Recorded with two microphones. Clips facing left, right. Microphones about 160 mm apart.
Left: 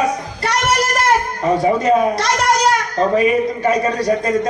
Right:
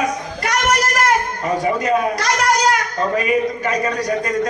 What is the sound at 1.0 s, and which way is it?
A child's voice, 30° left (ahead or behind).